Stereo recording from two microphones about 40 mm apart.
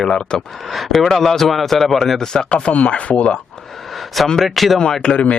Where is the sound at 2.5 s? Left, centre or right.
Left.